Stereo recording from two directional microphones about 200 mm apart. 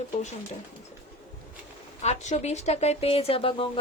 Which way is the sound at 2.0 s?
35° left (ahead or behind).